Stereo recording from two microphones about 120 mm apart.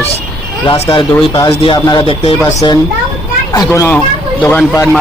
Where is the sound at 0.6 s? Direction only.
50° left (ahead or behind).